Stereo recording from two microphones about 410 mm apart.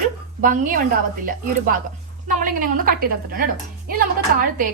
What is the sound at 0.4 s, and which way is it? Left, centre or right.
A woman's voice, centre.